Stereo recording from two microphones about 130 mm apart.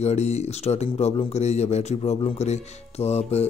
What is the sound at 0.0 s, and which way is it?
Speech, 55° left (ahead or behind).